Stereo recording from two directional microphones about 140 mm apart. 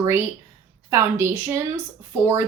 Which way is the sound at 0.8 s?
15° right (ahead or behind).